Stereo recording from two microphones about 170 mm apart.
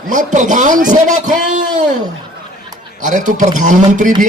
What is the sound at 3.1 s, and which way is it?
A man's voice, 45° right (ahead or behind).